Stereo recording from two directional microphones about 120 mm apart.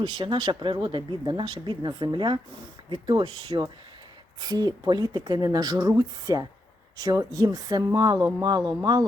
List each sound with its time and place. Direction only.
0.0 s speech: 40° right (ahead or behind)